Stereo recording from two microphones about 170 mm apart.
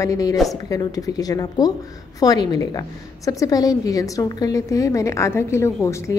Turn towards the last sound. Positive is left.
turn(degrees=15)  # may be behind; listen again after turning